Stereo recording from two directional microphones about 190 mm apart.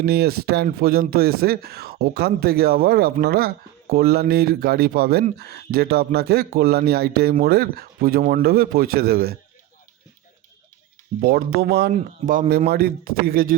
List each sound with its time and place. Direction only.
0.0 s speech: 55° right (ahead or behind)
11.2 s speech: 55° right (ahead or behind)
11.9 s speech: 45° right (ahead or behind)